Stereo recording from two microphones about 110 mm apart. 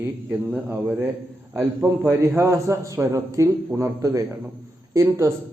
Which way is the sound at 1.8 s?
25° right (ahead or behind).